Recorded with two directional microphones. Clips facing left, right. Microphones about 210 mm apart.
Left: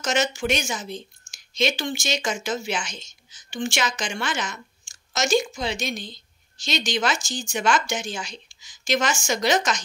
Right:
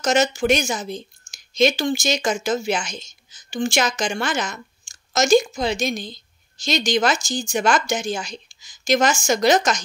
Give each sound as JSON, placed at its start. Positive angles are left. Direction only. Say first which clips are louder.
{"t": 0.0, "sound": "a woman's voice", "louder": "right 5 dB", "side_deg": -40}